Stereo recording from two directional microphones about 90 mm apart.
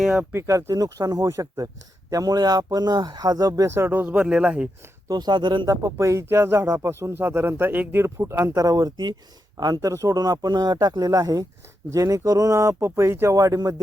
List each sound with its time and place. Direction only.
0.0 s speech: 15° right (ahead or behind)
0.3 s speech: 35° right (ahead or behind)
3.8 s speech: 20° right (ahead or behind)
5.0 s speech: 50° right (ahead or behind)
5.6 s speech: 35° right (ahead or behind); by 9.9 s 50° right (ahead or behind)
9.9 s speech: 35° right (ahead or behind)